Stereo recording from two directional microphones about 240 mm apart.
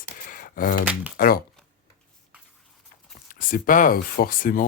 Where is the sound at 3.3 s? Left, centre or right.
Left.